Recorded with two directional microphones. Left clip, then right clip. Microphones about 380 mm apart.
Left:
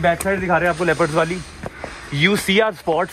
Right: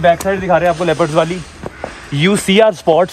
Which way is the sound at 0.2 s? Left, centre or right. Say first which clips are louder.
Right 5 dB; right.